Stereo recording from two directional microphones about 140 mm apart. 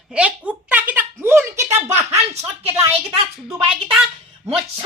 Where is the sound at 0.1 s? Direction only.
10° right (ahead or behind).